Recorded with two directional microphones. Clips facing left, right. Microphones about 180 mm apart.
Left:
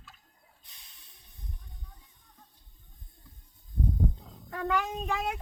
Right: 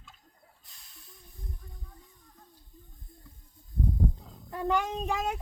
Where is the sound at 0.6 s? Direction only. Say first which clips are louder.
Even; 20° left (ahead or behind).